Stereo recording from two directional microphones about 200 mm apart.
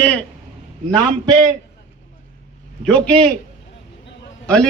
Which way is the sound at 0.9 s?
20° right (ahead or behind).